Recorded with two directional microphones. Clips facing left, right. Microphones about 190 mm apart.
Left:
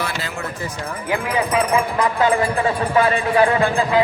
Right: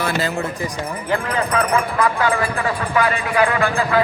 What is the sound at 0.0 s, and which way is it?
Speech, 45° right (ahead or behind).